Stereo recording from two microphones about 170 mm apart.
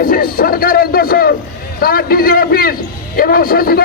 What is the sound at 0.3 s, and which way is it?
Speech, 60° left (ahead or behind).